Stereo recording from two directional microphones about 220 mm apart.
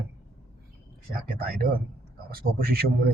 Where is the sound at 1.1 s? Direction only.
40° right (ahead or behind).